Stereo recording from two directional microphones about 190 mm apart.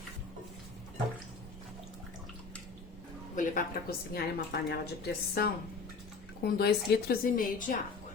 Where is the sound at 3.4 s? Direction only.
50° left (ahead or behind).